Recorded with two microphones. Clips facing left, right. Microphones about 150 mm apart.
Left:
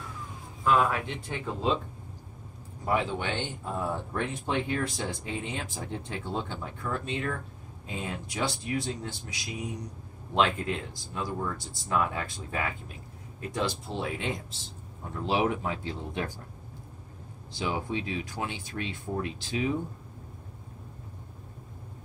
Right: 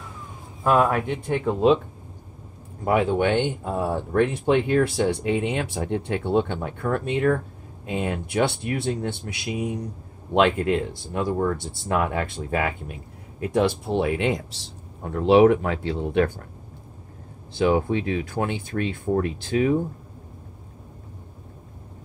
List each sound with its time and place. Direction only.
0.7 s speech: 50° right (ahead or behind); by 1.8 s 65° right (ahead or behind)
2.8 s speech: 55° right (ahead or behind)
13.4 s speech: 60° right (ahead or behind)
17.6 s speech: 55° right (ahead or behind)